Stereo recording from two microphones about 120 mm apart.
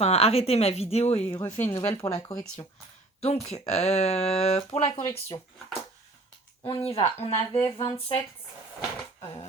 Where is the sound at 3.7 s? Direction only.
65° left (ahead or behind).